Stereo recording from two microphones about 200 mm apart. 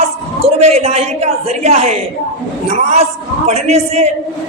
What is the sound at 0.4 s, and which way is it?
A man's voice, 30° right (ahead or behind).